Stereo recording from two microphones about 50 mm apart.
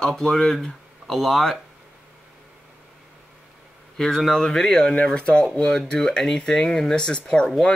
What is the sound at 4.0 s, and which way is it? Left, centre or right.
Speech, centre.